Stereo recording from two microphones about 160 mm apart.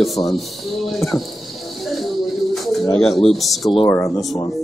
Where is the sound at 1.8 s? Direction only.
Centre (ahead or behind).